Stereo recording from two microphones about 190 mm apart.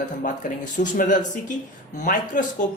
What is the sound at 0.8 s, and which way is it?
A woman's voice, 40° left (ahead or behind).